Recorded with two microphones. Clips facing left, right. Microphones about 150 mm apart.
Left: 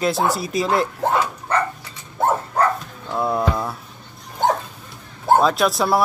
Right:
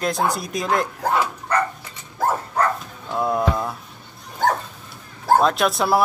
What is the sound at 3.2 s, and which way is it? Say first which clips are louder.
Speech: even; 5° left (ahead or behind).